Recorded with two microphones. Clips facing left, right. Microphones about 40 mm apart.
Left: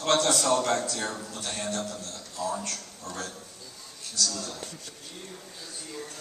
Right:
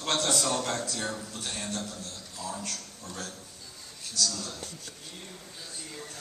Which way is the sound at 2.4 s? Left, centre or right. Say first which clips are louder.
Left 6 dB; left.